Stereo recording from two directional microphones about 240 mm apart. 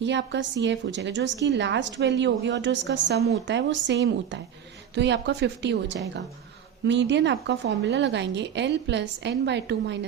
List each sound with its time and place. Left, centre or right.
0.0 s a woman's voice: right